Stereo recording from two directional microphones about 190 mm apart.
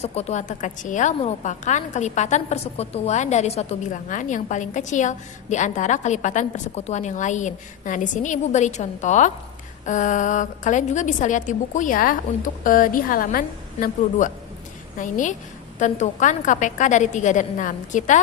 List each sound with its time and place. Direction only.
0.0 s a woman's voice: 35° left (ahead or behind)